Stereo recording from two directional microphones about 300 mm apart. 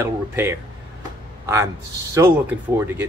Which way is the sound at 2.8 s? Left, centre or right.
Centre.